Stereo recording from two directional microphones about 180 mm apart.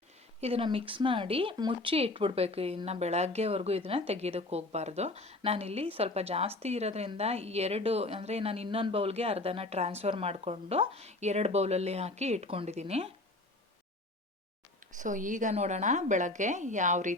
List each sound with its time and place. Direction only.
0.4 s speech: 30° right (ahead or behind)
14.9 s a woman's voice: 45° right (ahead or behind)